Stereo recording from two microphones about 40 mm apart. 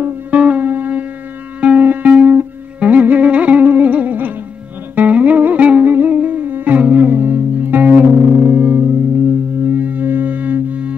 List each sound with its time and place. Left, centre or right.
0.3 s music: right
1.6 s music: right
5.9 s music: right